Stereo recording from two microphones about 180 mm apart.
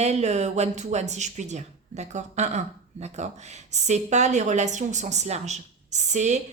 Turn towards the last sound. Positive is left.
turn(degrees=-40)  # may be behind; listen again after turning